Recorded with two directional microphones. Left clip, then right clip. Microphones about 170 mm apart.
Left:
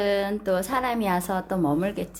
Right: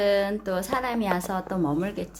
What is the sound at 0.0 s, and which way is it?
A woman's voice, centre (ahead or behind).